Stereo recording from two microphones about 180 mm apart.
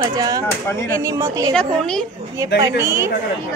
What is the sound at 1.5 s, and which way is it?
Speech, 5° left (ahead or behind).